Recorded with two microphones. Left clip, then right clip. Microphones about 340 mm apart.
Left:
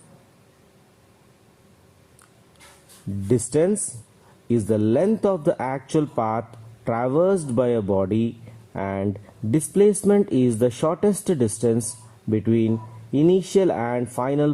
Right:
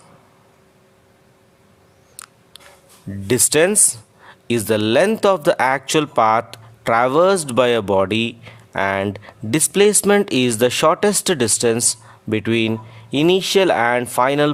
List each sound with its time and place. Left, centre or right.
3.2 s speech: right